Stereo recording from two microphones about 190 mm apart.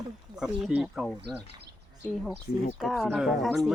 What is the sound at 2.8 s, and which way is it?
Speech, centre (ahead or behind).